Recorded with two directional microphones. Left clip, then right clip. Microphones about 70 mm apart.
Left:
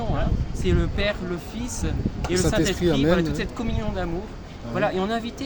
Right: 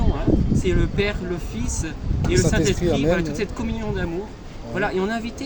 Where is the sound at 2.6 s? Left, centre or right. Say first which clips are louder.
Right 1 dB; left.